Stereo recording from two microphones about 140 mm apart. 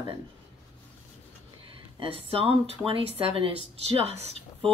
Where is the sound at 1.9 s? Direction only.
40° right (ahead or behind).